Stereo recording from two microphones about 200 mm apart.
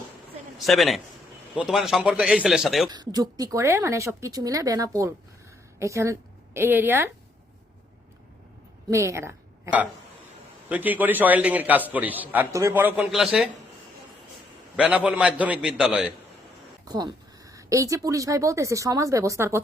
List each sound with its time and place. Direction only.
0.6 s a man's voice: centre (ahead or behind)
2.9 s a woman's voice: 20° right (ahead or behind)
8.9 s speech: 15° right (ahead or behind)
10.7 s speech: 10° right (ahead or behind)
14.8 s a man's voice: 5° right (ahead or behind)
16.8 s speech: 20° right (ahead or behind)